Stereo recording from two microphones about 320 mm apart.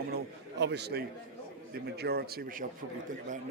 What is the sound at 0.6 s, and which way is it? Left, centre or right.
Speech, right.